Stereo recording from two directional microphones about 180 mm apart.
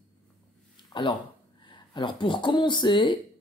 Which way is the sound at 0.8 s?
25° left (ahead or behind).